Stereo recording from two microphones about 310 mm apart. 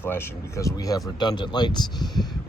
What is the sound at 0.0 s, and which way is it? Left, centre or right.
Speech, centre.